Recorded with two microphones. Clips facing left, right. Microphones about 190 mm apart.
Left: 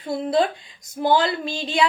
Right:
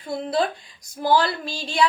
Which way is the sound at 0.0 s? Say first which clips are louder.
Left 3 dB; 25° left (ahead or behind).